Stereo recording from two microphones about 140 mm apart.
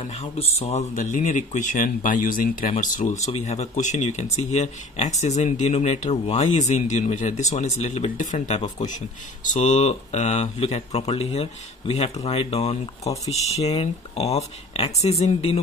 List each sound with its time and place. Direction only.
0.2 s speech: 50° left (ahead or behind)
0.9 s speech: 65° left (ahead or behind); by 2.7 s 80° left
2.8 s speech: 65° left (ahead or behind)
9.4 s speech: 60° left (ahead or behind)